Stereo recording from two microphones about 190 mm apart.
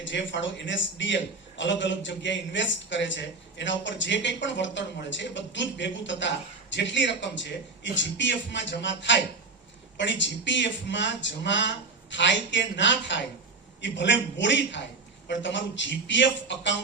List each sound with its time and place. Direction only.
0.0 s a man's voice: 75° left (ahead or behind)